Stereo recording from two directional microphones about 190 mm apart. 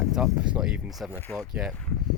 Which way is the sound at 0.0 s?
Centre (ahead or behind).